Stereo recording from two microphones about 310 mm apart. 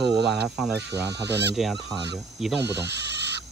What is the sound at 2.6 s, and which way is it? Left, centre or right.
Speech, right.